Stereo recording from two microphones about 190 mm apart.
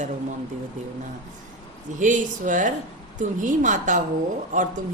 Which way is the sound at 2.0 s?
40° right (ahead or behind).